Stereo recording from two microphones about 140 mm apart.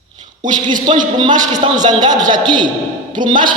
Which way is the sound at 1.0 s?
30° right (ahead or behind).